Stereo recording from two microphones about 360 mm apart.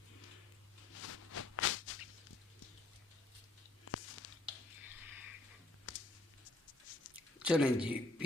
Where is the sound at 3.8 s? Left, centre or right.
Left.